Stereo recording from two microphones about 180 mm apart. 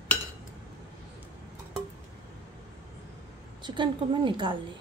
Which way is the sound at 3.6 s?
25° right (ahead or behind).